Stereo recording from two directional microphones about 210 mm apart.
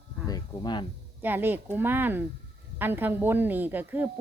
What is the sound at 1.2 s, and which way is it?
Speech, 10° right (ahead or behind).